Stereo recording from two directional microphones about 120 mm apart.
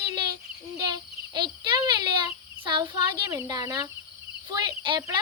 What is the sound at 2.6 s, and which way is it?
A child's voice, 40° right (ahead or behind).